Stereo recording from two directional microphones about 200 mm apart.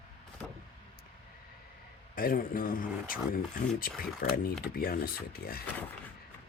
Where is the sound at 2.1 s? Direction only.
45° left (ahead or behind).